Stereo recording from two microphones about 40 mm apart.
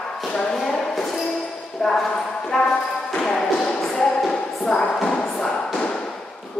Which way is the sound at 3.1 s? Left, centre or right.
Centre.